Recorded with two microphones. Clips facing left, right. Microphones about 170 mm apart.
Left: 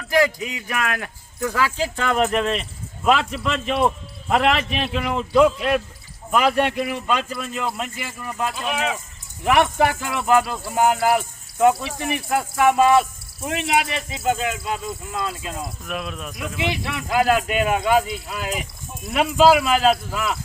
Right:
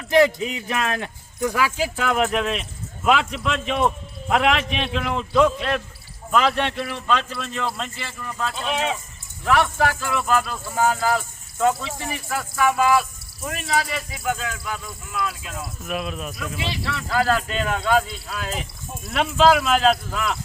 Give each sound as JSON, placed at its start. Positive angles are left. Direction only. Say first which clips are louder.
{"t": 0.1, "sound": "speech", "louder": "right 3 dB", "side_deg": -25}
{"t": 1.5, "sound": "speech", "louder": "even", "side_deg": -15}
{"t": 8.7, "sound": "speech", "louder": "right 4 dB", "side_deg": -30}
{"t": 9.4, "sound": "speech", "louder": "left 2 dB", "side_deg": 20}
{"t": 15.9, "sound": "speech", "louder": "right 4 dB", "side_deg": 0}
{"t": 16.6, "sound": "speech", "louder": "left 5 dB", "side_deg": 20}